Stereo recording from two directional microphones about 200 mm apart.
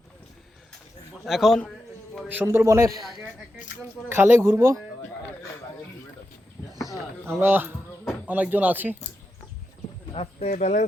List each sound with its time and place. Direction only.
1.2 s a man's voice: centre (ahead or behind)
2.3 s a man's voice: 10° right (ahead or behind)
4.1 s a man's voice: 10° right (ahead or behind)
6.6 s a sound: centre (ahead or behind)
7.3 s a man's voice: 10° right (ahead or behind)
10.1 s speech: 30° left (ahead or behind)